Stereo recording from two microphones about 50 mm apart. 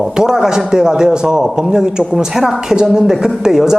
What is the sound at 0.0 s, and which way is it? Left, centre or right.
Speech, centre.